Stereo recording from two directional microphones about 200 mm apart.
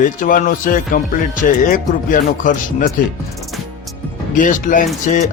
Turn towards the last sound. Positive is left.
turn(degrees=40)  # may be behind; listen again after turning